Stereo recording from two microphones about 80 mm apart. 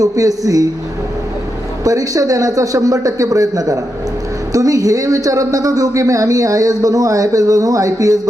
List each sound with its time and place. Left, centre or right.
0.0 s speech: right
1.8 s speech: right